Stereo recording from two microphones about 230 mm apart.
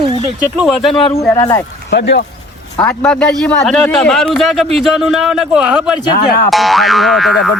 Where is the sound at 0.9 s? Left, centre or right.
Left.